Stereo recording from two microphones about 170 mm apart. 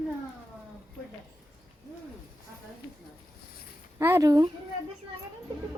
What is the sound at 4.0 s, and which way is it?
Speech, 15° right (ahead or behind).